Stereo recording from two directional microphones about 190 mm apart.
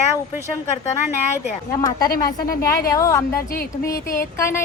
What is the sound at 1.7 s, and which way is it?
A woman's voice, 20° left (ahead or behind).